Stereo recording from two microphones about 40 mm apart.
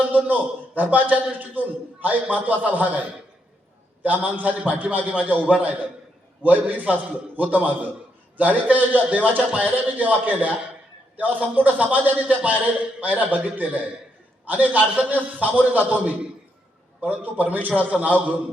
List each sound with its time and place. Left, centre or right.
0.1 s a man's voice: right